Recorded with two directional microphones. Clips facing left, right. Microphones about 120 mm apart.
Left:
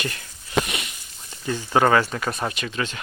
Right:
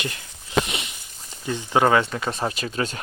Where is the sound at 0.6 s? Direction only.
20° right (ahead or behind).